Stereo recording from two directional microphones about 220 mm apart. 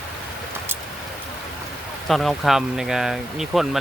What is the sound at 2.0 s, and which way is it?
Speech, centre (ahead or behind).